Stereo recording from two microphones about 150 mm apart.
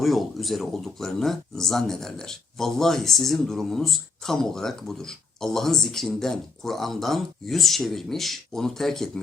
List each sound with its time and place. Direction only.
0.0 s speech: centre (ahead or behind)